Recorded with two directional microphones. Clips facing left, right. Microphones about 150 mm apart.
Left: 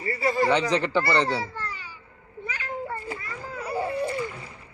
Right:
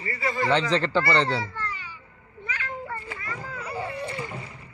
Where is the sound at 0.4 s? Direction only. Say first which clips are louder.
Right 2 dB; 15° left (ahead or behind).